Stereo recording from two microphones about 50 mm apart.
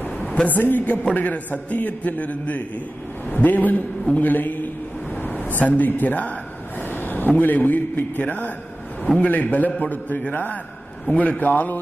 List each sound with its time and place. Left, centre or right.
0.5 s a man's voice: left